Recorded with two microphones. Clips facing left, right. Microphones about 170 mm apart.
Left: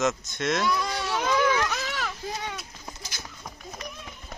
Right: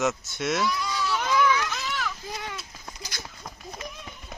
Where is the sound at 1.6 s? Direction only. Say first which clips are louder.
Left 2 dB; 65° left (ahead or behind).